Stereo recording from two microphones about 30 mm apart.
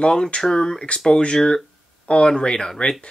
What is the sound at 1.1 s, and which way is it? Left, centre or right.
Speech, left.